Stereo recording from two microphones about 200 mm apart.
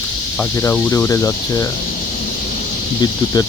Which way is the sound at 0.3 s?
10° left (ahead or behind).